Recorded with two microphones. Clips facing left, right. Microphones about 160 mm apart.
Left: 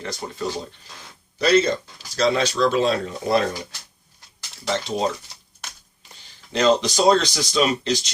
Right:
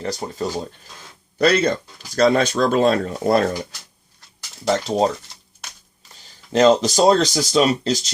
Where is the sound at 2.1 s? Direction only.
50° right (ahead or behind).